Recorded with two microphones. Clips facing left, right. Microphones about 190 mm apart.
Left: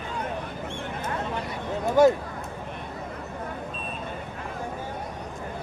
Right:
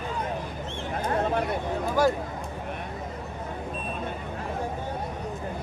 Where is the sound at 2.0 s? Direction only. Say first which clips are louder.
Left 6 dB; 25° left (ahead or behind).